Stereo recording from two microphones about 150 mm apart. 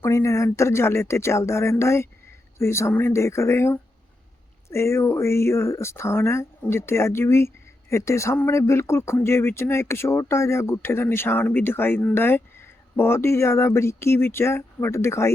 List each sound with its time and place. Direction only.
0.0 s speech: 20° left (ahead or behind)